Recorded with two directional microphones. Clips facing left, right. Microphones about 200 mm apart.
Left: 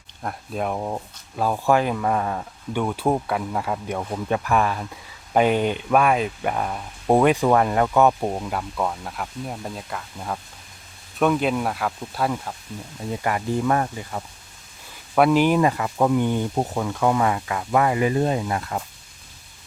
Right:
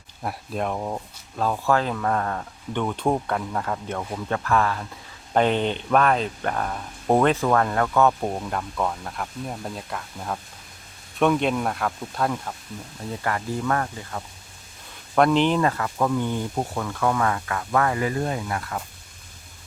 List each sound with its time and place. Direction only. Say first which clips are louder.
0.2 s speech: even; centre (ahead or behind)
13.1 s speech: left 3 dB; 15° left (ahead or behind)
15.1 s speech: left 2 dB; 5° left (ahead or behind); by 18.8 s 25° left (ahead or behind)